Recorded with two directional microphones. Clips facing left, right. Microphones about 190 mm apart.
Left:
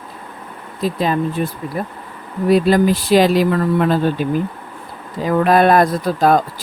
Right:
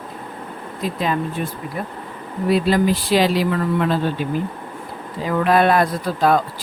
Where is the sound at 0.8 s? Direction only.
35° left (ahead or behind).